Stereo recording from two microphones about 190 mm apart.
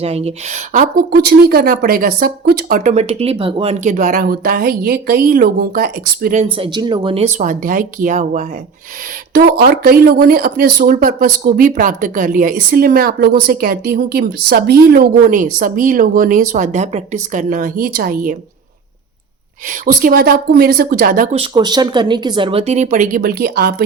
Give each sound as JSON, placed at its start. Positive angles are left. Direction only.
{"t": 0.0, "sound": "speech", "side_deg": -35}
{"t": 6.4, "sound": "speech", "side_deg": -25}
{"t": 9.3, "sound": "speech", "side_deg": -50}
{"t": 19.8, "sound": "speech", "side_deg": -45}
{"t": 21.3, "sound": "speech", "side_deg": -25}